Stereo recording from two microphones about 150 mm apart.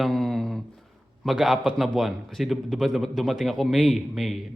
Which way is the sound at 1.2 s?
Centre (ahead or behind).